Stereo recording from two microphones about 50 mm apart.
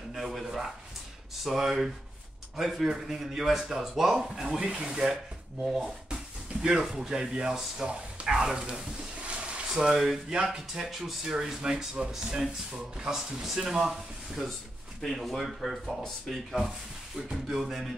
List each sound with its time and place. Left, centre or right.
0.1 s speech: centre
8.5 s a sound: centre
9.8 s speech: centre
15.0 s speech: centre